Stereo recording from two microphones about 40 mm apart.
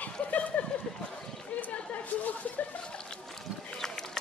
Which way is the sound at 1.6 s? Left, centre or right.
Left.